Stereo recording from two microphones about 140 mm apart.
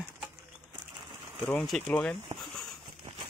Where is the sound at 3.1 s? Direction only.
50° right (ahead or behind).